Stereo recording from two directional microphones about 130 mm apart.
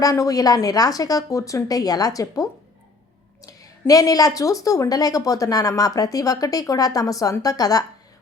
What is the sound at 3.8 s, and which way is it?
A woman's voice, 25° left (ahead or behind).